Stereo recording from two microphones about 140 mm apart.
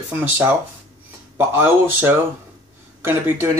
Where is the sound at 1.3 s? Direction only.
15° right (ahead or behind).